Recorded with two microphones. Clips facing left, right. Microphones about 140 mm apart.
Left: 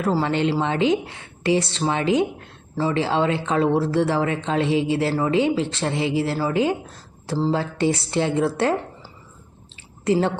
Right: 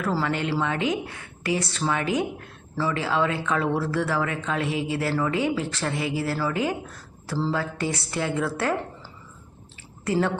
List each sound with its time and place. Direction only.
0.1 s a woman's voice: 25° left (ahead or behind)
10.0 s speech: 25° left (ahead or behind)